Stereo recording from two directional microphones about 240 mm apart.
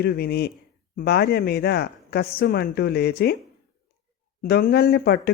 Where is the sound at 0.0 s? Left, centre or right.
Left.